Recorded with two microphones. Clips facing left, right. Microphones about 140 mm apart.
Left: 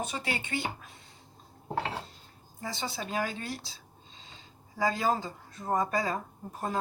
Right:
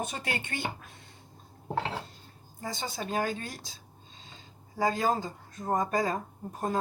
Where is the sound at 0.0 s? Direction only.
50° right (ahead or behind).